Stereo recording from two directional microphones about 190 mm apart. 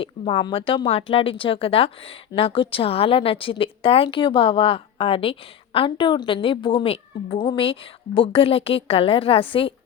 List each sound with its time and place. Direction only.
0.0 s speech: 25° left (ahead or behind)